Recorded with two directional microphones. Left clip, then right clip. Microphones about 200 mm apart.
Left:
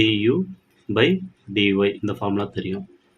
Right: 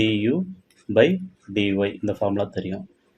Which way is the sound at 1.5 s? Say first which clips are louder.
Left 3 dB; 20° right (ahead or behind).